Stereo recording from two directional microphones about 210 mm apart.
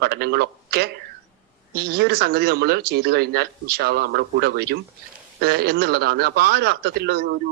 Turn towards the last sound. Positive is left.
turn(degrees=-55)  # may be behind; listen again after turning